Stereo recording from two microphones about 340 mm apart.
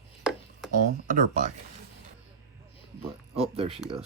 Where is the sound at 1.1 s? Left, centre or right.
Right.